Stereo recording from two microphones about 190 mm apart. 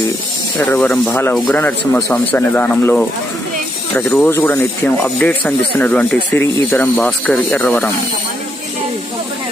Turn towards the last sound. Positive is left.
turn(degrees=5)  # may be behind; listen again after turning